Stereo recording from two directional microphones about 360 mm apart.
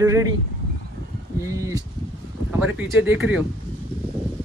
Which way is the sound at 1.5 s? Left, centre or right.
Centre.